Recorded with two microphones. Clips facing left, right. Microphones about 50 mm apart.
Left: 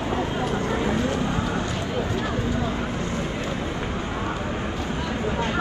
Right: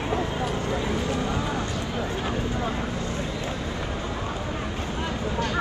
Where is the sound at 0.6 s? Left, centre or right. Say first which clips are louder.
Left 3 dB; left.